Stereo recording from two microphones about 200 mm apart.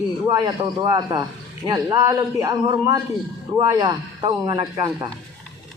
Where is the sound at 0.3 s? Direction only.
20° right (ahead or behind).